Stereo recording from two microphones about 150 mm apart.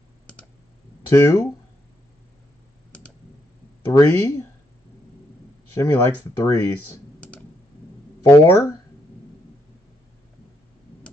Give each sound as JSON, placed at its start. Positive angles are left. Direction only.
{"t": 1.1, "sound": "speech", "side_deg": 20}
{"t": 3.9, "sound": "speech", "side_deg": 20}
{"t": 5.8, "sound": "speech", "side_deg": 20}
{"t": 7.2, "sound": "computer keyboard", "side_deg": 5}
{"t": 8.2, "sound": "speech", "side_deg": 25}